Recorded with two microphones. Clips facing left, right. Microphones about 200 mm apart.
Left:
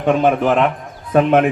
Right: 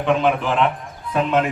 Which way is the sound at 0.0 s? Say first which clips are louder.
Left 4 dB; 45° left (ahead or behind).